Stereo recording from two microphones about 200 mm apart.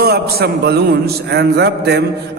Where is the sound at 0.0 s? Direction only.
50° right (ahead or behind).